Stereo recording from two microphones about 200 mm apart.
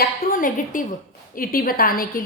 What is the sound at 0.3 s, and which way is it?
A woman's voice, 45° left (ahead or behind).